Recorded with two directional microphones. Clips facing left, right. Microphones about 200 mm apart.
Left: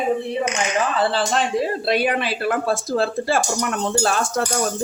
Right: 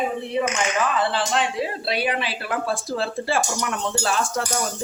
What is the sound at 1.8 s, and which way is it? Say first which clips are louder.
Speech: left 5 dB; 50° left (ahead or behind).